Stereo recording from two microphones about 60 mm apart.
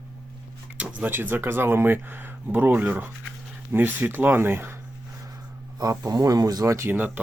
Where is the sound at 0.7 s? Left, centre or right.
Right.